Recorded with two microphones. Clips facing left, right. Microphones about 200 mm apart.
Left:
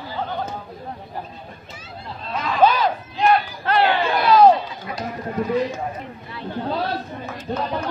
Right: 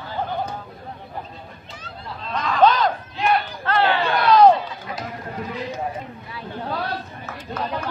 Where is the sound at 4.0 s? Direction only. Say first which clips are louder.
Right 1 dB; centre (ahead or behind).